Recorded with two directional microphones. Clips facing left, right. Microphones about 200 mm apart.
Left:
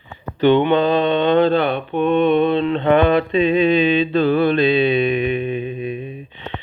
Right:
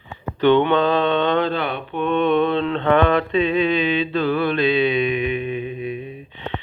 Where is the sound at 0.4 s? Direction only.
10° left (ahead or behind).